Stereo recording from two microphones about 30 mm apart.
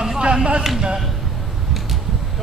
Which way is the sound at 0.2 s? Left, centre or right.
Right.